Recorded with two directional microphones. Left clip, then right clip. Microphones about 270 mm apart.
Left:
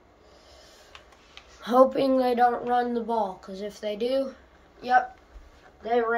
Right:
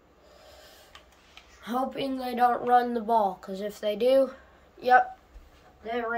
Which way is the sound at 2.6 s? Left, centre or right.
Centre.